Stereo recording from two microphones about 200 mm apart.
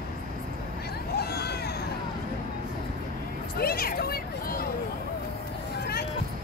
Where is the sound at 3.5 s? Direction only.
50° left (ahead or behind).